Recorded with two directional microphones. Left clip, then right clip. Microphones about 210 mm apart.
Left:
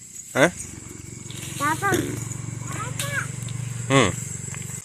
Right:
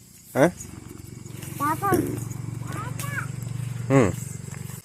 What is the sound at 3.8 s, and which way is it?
Speech, 20° right (ahead or behind).